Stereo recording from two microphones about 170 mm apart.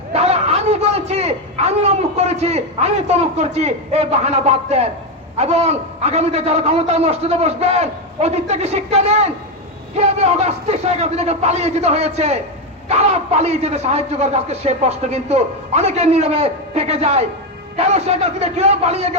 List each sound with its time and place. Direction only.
0.1 s a man's voice: 40° right (ahead or behind)